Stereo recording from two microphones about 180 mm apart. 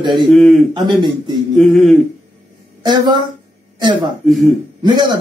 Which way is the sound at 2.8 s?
25° right (ahead or behind).